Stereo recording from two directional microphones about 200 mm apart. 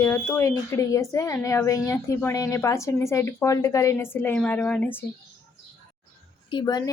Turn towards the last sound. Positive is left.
turn(degrees=20)  # may be behind; listen again after turning